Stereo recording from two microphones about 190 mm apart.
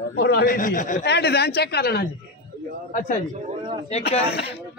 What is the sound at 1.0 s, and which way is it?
A woman's voice, 60° left (ahead or behind).